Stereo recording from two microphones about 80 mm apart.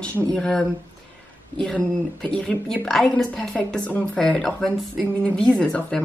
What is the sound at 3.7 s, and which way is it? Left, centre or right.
Speech, centre.